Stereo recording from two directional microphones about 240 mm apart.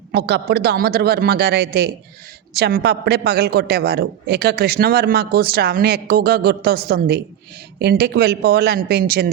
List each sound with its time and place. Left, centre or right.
0.1 s a man's voice: right